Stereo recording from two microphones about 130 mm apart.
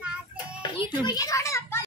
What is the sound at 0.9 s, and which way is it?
Speech, 35° left (ahead or behind).